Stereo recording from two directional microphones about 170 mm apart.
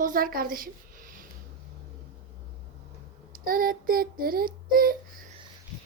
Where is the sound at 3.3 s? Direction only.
55° right (ahead or behind).